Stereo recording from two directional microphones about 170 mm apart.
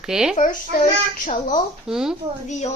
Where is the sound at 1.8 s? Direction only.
5° right (ahead or behind).